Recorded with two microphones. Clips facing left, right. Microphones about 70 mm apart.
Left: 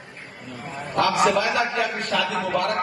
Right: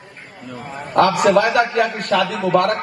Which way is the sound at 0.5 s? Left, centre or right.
Right.